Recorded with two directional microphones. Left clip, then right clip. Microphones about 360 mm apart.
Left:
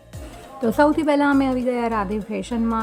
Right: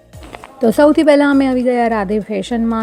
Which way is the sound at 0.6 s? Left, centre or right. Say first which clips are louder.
Right 8 dB; centre.